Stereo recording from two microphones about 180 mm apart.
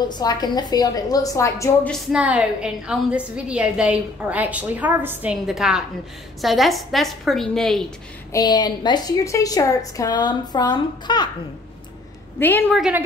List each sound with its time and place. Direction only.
0.1 s a woman's voice: 20° left (ahead or behind)
2.1 s a woman's voice: 5° right (ahead or behind)
8.3 s a woman's voice: 20° left (ahead or behind)
12.4 s a woman's voice: 10° left (ahead or behind)
12.6 s a woman's voice: 5° right (ahead or behind)